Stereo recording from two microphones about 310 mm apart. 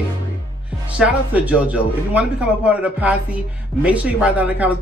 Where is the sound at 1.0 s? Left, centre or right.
Centre.